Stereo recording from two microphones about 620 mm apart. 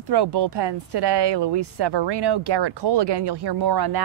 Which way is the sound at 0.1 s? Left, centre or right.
Right.